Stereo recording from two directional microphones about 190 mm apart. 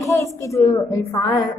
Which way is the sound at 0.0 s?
15° left (ahead or behind).